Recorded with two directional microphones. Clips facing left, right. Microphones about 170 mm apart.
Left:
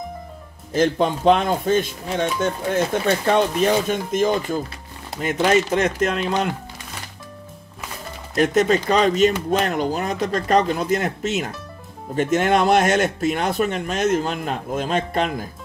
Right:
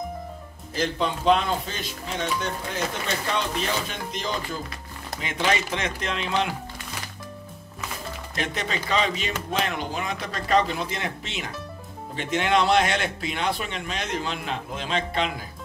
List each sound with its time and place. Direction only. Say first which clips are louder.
0.7 s speech: left 7 dB; 50° left (ahead or behind)
8.4 s speech: left 13 dB; 45° left (ahead or behind)